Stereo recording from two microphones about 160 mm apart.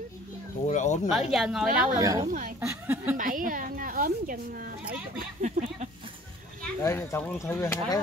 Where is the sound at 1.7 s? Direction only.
60° right (ahead or behind).